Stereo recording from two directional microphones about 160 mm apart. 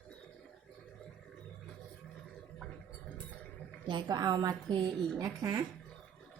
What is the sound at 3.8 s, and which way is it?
Speech, 25° right (ahead or behind).